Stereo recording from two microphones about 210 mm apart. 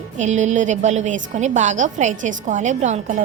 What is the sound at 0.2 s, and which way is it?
A woman's voice, 35° right (ahead or behind).